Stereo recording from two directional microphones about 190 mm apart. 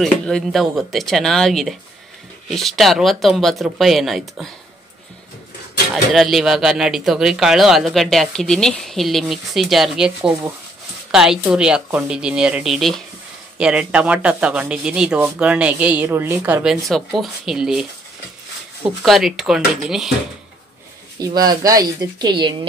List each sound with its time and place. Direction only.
0.0 s speech: centre (ahead or behind)
6.1 s speech: centre (ahead or behind)
19.0 s speech: centre (ahead or behind)
21.5 s speech: 20° right (ahead or behind)